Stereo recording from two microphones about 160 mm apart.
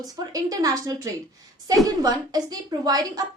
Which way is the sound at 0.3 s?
20° right (ahead or behind).